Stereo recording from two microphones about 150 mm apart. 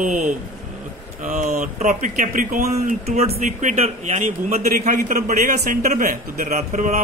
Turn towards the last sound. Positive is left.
turn(degrees=-55)  # may be behind; listen again after turning